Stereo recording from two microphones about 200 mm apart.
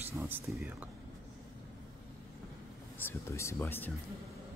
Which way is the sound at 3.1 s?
15° left (ahead or behind).